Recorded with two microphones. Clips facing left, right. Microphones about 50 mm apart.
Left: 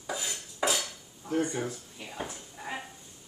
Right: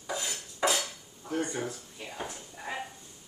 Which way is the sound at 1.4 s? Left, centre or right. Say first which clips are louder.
Left 2 dB; centre.